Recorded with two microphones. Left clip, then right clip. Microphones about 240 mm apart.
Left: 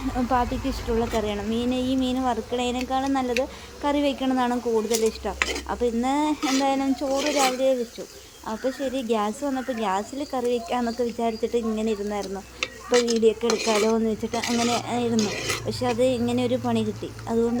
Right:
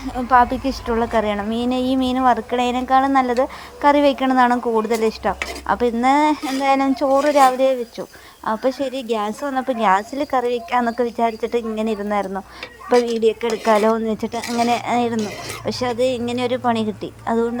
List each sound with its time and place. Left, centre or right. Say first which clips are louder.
0.3 s speech: right 11 dB; centre
3.8 s stir: right 9 dB; centre
8.4 s speech: right 7 dB; centre
12.9 s stir: right 4 dB; right
13.7 s speech: right 9 dB; centre
15.6 s stir: right 5 dB; centre